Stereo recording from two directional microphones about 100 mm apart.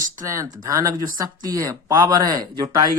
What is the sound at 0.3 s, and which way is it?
Speech, 35° right (ahead or behind).